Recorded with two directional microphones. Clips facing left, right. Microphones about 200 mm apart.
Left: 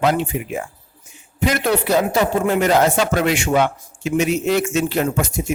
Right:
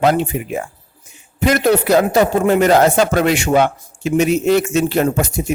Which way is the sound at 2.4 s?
40° right (ahead or behind).